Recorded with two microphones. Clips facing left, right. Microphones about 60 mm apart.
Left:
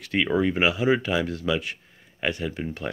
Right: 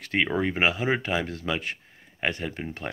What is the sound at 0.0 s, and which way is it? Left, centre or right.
Speech, right.